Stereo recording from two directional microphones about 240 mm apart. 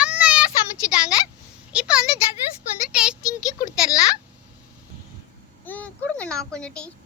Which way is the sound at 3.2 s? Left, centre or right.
Centre.